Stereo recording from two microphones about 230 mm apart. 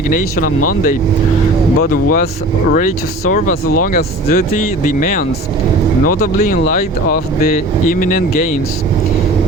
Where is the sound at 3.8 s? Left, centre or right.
Left.